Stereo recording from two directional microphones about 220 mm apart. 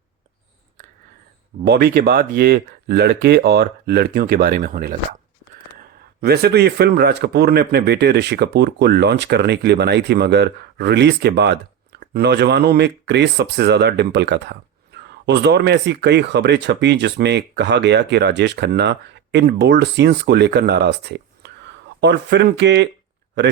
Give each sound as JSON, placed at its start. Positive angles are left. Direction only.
{"t": 1.6, "sound": "speech", "side_deg": -45}
{"t": 6.2, "sound": "speech", "side_deg": -45}